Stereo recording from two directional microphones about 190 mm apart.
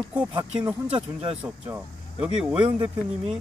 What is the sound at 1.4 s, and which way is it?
Speech, 10° right (ahead or behind).